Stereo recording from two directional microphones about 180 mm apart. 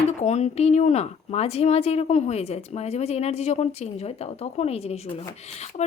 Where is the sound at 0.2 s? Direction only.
40° left (ahead or behind).